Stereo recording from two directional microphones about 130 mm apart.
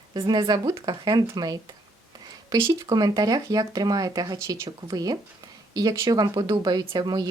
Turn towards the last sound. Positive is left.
turn(degrees=-30)  # may be behind; listen again after turning